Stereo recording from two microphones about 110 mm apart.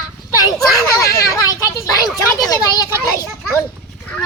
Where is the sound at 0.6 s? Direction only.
30° left (ahead or behind).